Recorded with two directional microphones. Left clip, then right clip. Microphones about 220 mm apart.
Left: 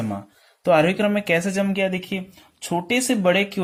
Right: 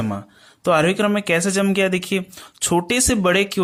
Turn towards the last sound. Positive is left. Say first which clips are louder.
# right 2 dB
turn(degrees=-25)  # may be behind; listen again after turning